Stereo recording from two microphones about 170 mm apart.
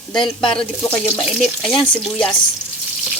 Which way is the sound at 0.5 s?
10° left (ahead or behind).